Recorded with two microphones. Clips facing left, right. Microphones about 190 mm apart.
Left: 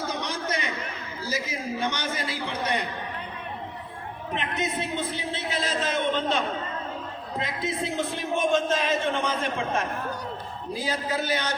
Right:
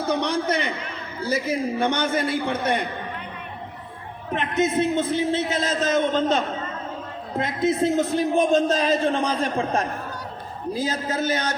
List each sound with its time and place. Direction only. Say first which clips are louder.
0.1 s a sound: right 8 dB; 60° right (ahead or behind)
1.2 s a man's voice: right 8 dB; 60° right (ahead or behind)
4.4 s a man's voice: right 8 dB; 50° right (ahead or behind)